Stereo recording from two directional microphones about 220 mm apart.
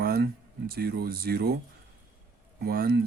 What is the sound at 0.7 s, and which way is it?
Speech, 45° right (ahead or behind).